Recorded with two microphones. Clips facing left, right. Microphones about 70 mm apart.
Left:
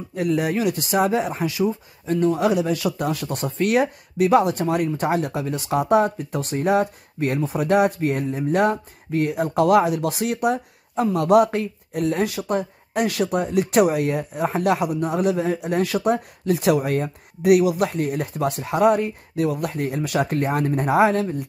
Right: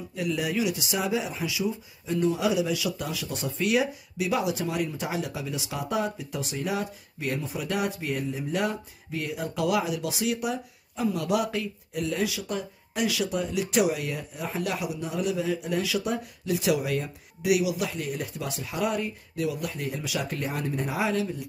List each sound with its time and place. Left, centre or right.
0.1 s speech: left
16.7 s speech: left